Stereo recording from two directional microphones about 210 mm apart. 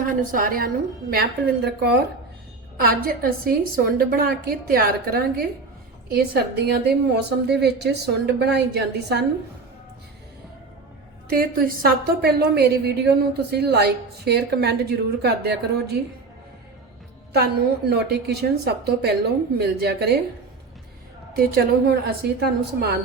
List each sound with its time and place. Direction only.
0.0 s a woman's voice: 40° right (ahead or behind)
11.3 s a woman's voice: 45° right (ahead or behind)
17.3 s a woman's voice: 50° right (ahead or behind)
21.3 s a woman's voice: 50° right (ahead or behind)